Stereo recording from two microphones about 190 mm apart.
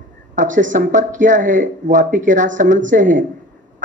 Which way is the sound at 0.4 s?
45° right (ahead or behind).